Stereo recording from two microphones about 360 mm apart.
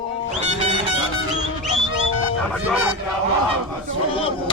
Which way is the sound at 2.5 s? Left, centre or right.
Centre.